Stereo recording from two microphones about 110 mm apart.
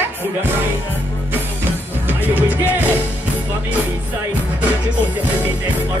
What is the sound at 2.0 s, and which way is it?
Music, 20° right (ahead or behind).